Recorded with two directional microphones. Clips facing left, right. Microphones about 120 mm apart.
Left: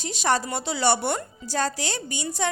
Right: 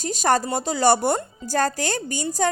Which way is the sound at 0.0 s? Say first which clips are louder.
Right 4 dB; 45° right (ahead or behind).